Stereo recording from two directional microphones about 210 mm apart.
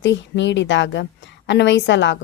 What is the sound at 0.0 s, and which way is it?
Speech, 60° left (ahead or behind).